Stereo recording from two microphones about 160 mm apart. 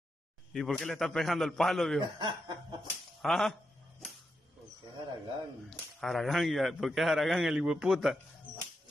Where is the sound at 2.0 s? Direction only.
30° right (ahead or behind).